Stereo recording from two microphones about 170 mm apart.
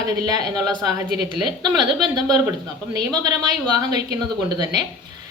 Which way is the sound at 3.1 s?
25° right (ahead or behind).